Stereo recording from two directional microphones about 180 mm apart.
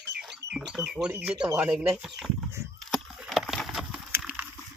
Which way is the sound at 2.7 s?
Centre (ahead or behind).